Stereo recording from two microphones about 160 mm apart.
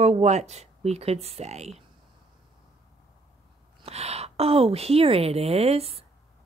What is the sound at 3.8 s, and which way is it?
A woman's voice, 40° right (ahead or behind).